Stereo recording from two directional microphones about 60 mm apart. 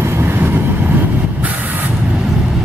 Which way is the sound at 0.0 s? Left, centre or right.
Right.